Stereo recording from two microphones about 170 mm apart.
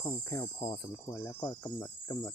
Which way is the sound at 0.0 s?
20° left (ahead or behind).